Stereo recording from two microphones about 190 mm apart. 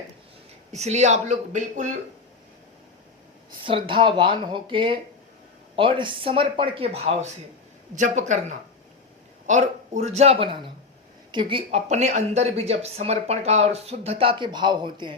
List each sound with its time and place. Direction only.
0.7 s speech: 35° right (ahead or behind)
3.6 s speech: 25° right (ahead or behind)